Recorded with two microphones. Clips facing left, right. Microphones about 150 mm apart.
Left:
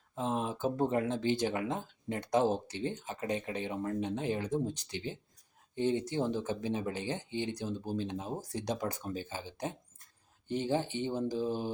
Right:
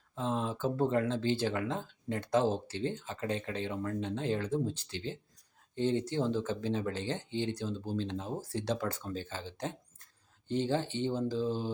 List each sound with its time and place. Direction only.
0.2 s speech: 15° left (ahead or behind)